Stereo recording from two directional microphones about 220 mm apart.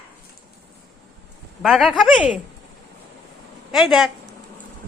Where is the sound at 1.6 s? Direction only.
Centre (ahead or behind).